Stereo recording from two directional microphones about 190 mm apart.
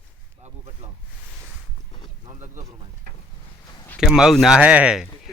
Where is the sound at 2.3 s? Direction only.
40° right (ahead or behind).